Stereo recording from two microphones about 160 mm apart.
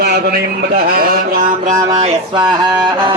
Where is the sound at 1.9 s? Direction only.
35° right (ahead or behind).